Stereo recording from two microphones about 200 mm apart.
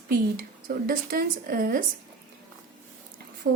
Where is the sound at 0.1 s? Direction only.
50° right (ahead or behind).